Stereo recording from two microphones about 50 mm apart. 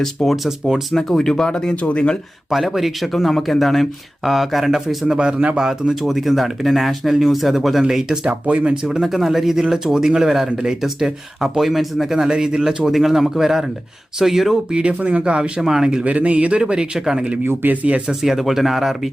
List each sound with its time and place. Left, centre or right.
0.0 s speech: centre
0.4 s speech: centre
0.9 s speech: centre; by 2.1 s left
2.5 s speech: centre
5.1 s speech: centre
5.9 s speech: centre
8.2 s speech: right
8.7 s speech: centre
12.9 s speech: centre
14.7 s speech: right
16.0 s speech: right; by 17.3 s centre
17.4 s speech: right
18.1 s speech: centre